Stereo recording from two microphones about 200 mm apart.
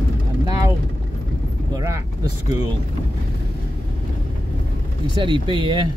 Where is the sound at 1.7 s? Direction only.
15° right (ahead or behind).